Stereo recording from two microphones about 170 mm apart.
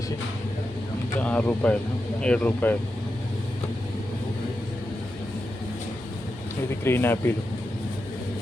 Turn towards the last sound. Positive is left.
turn(degrees=15)  # may be behind; listen again after turning